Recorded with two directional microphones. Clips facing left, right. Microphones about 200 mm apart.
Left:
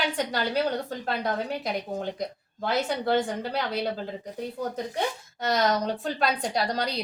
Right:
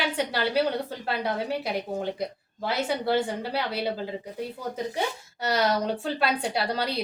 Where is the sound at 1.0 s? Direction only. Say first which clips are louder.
Right 1 dB; 5° right (ahead or behind).